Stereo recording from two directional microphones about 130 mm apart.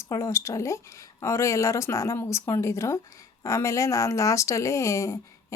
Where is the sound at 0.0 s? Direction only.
20° left (ahead or behind).